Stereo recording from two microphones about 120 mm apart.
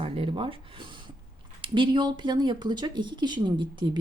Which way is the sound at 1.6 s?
40° right (ahead or behind).